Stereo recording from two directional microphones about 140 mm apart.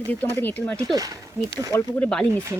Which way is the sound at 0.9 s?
25° right (ahead or behind).